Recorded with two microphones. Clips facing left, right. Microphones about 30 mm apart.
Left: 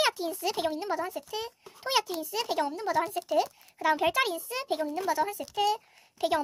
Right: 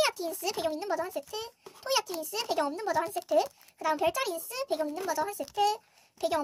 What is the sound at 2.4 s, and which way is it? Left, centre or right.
Speech, centre.